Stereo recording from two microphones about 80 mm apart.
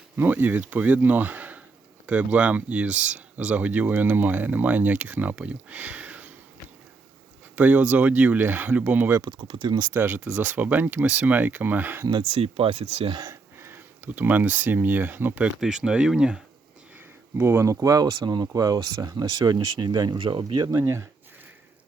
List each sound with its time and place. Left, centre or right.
0.2 s speech: right
7.5 s speech: centre
9.2 s speech: right
9.9 s speech: right
13.1 s speech: right
13.6 s speech: right
15.4 s speech: centre
17.3 s speech: right
18.1 s speech: right
18.4 s speech: right
20.7 s speech: right